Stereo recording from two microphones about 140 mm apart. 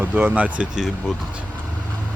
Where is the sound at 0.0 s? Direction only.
15° right (ahead or behind).